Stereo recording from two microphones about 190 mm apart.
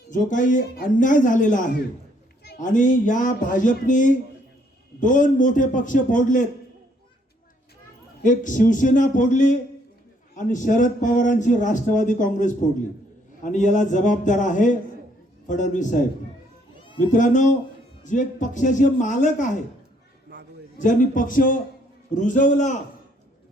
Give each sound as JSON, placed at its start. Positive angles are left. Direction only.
{"t": 0.1, "sound": "a man's voice", "side_deg": 40}
{"t": 8.2, "sound": "a man's voice", "side_deg": 40}
{"t": 17.1, "sound": "a man's voice", "side_deg": 40}
{"t": 20.7, "sound": "a man's voice", "side_deg": 40}